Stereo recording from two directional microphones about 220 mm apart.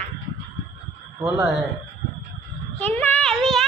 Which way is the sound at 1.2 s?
Centre (ahead or behind).